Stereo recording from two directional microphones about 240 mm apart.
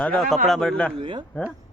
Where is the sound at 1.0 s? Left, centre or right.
Right.